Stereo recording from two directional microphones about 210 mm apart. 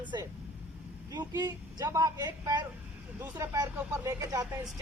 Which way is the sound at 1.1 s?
20° right (ahead or behind).